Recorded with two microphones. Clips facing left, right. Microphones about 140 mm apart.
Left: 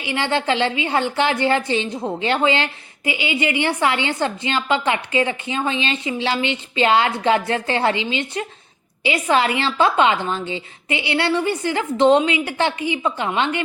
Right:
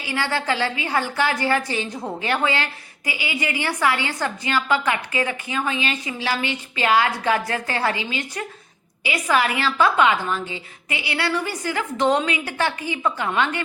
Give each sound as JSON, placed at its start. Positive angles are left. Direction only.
{"t": 0.0, "sound": "a woman's voice", "side_deg": 25}